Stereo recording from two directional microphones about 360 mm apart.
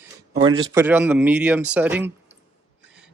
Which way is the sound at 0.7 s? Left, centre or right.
Centre.